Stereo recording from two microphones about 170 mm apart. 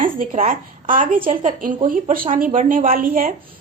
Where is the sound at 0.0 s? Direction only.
55° right (ahead or behind).